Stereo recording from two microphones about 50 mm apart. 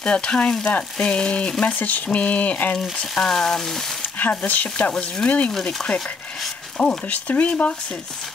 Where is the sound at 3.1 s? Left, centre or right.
Centre.